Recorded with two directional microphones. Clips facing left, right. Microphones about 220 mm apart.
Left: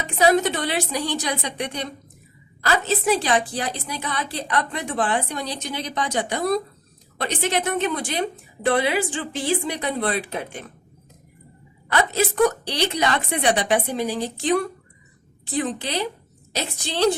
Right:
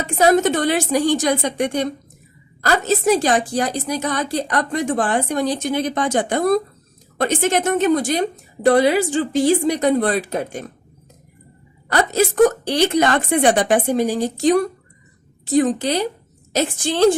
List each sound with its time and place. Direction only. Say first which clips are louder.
0.0 s a woman's voice: right 4 dB; 45° right (ahead or behind)
11.9 s a woman's voice: right 4 dB; 45° right (ahead or behind)